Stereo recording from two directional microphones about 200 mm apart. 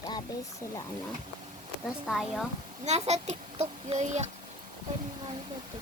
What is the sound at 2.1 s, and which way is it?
Speech, centre (ahead or behind).